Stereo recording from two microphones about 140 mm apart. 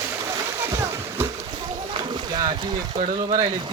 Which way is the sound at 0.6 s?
20° right (ahead or behind).